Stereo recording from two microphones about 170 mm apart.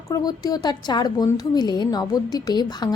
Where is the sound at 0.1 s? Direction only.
25° left (ahead or behind).